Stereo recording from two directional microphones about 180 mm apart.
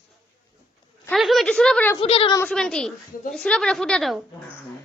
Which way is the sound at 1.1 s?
Centre (ahead or behind).